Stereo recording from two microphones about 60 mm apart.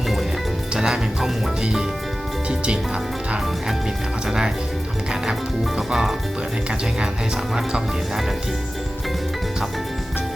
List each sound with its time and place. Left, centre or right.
0.7 s music: centre
2.5 s speech: centre
4.3 s music: centre
7.5 s music: centre